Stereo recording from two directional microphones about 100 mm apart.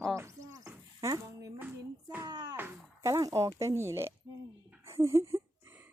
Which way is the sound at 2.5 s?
25° right (ahead or behind).